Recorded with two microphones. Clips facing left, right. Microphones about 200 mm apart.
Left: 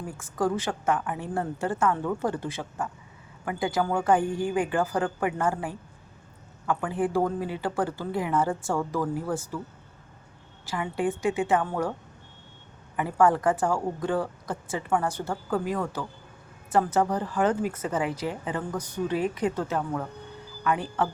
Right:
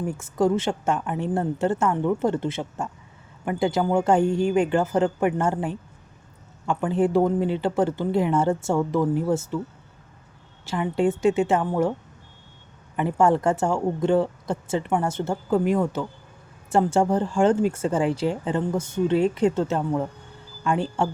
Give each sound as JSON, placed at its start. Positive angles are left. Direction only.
{"t": 0.0, "sound": "speech", "side_deg": -25}
{"t": 10.7, "sound": "speech", "side_deg": -25}
{"t": 13.0, "sound": "speech", "side_deg": -25}